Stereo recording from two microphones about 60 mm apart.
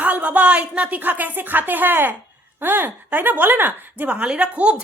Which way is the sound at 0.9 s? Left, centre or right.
Right.